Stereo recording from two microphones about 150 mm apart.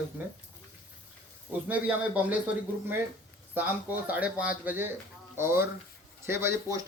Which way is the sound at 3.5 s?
10° right (ahead or behind).